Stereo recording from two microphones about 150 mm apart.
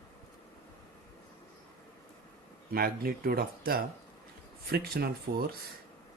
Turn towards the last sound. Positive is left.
turn(degrees=-90)